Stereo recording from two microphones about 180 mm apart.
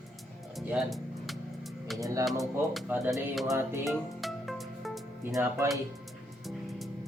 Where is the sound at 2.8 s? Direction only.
10° right (ahead or behind).